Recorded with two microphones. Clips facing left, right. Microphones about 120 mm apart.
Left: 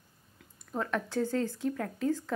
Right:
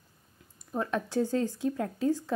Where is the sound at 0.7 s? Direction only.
20° right (ahead or behind).